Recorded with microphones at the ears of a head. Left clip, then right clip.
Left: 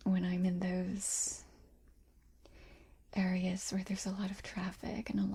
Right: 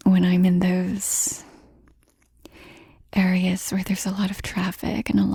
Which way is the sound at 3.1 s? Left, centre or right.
Right.